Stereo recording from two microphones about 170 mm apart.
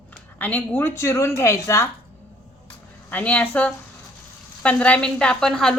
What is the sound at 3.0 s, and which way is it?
A woman's voice, 10° left (ahead or behind).